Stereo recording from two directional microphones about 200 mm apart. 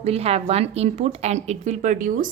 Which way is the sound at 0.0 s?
30° right (ahead or behind).